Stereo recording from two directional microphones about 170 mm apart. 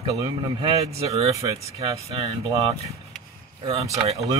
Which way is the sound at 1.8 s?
35° right (ahead or behind).